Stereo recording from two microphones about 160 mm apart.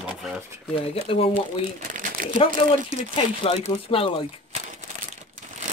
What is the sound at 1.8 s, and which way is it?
Crumpling, 55° right (ahead or behind).